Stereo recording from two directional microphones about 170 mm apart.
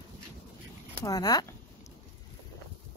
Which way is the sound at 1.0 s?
20° left (ahead or behind).